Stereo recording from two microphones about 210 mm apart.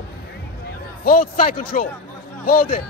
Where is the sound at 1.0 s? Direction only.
40° left (ahead or behind).